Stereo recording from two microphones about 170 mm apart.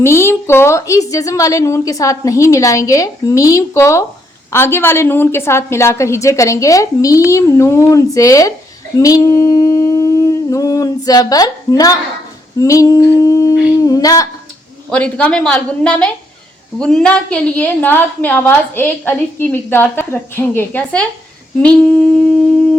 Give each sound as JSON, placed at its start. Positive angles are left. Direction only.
{"t": 0.0, "sound": "a woman's voice", "side_deg": 15}
{"t": 9.0, "sound": "humming", "side_deg": 20}
{"t": 12.5, "sound": "a woman's voice", "side_deg": 20}
{"t": 14.8, "sound": "a woman's voice", "side_deg": 5}